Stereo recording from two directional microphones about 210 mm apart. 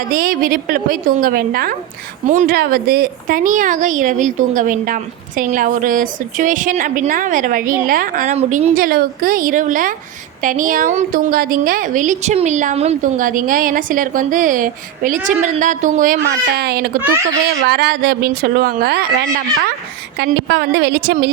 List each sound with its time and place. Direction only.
0.1 s speech: 45° right (ahead or behind)
16.6 s speech: 50° right (ahead or behind)